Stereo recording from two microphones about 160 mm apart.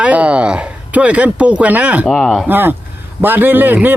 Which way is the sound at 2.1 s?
5° left (ahead or behind).